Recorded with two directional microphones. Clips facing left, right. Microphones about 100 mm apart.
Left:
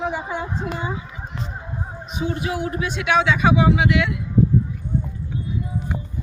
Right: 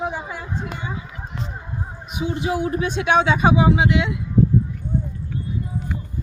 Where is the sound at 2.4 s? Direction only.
25° right (ahead or behind).